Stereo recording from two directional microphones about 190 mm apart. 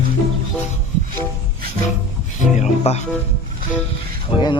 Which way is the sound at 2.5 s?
35° left (ahead or behind).